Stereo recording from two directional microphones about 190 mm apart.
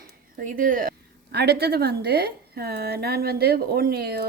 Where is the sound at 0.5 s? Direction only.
45° right (ahead or behind).